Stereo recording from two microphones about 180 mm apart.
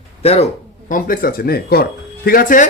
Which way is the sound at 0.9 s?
50° left (ahead or behind).